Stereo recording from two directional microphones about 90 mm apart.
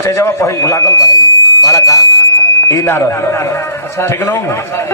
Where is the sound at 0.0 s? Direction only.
30° left (ahead or behind).